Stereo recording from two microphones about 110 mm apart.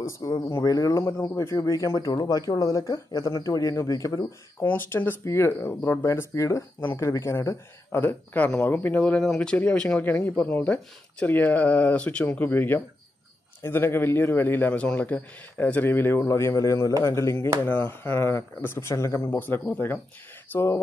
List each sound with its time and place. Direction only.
0.0 s a man's voice: 25° left (ahead or behind)
4.6 s a man's voice: 20° left (ahead or behind)
6.8 s a man's voice: 20° left (ahead or behind)